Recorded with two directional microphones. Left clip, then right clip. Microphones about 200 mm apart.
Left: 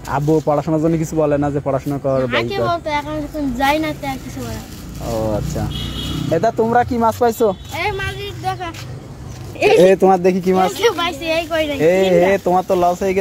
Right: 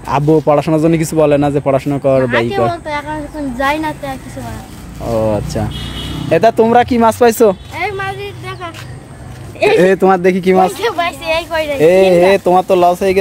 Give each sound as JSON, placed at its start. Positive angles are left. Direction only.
{"t": 0.1, "sound": "speech", "side_deg": -40}
{"t": 2.3, "sound": "speech", "side_deg": -10}
{"t": 5.0, "sound": "speech", "side_deg": -45}
{"t": 7.7, "sound": "a sound", "side_deg": 5}
{"t": 10.0, "sound": "speech", "side_deg": -20}
{"t": 10.8, "sound": "speech", "side_deg": -5}
{"t": 11.1, "sound": "speech", "side_deg": -25}